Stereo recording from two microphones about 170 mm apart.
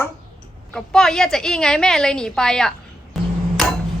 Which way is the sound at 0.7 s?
5° left (ahead or behind).